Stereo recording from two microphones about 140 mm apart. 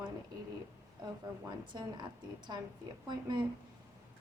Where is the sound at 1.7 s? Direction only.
30° right (ahead or behind).